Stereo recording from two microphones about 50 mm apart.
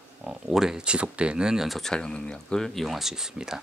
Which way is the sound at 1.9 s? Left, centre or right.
Centre.